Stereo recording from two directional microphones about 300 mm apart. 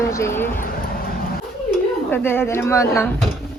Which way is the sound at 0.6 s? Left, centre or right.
Left.